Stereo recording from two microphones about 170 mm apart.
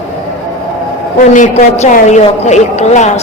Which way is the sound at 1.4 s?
40° left (ahead or behind).